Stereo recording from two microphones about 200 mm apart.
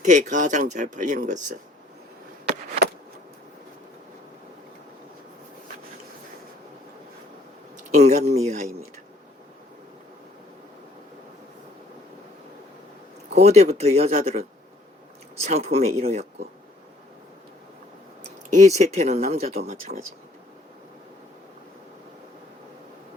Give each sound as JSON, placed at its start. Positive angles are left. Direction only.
{"t": 0.0, "sound": "speech", "side_deg": -35}
{"t": 7.9, "sound": "speech", "side_deg": -35}
{"t": 13.3, "sound": "speech", "side_deg": -35}
{"t": 18.2, "sound": "speech", "side_deg": -35}